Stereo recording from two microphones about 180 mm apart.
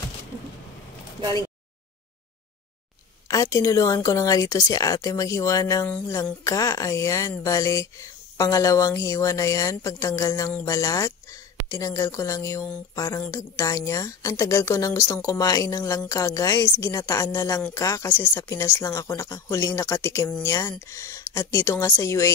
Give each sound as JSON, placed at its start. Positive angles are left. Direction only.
{"t": 3.3, "sound": "a woman's voice", "side_deg": 20}